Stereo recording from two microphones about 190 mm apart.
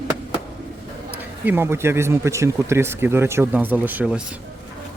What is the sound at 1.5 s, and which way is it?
Speech, 10° right (ahead or behind).